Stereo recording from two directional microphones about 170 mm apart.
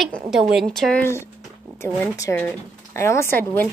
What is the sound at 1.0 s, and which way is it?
Speech, 15° left (ahead or behind).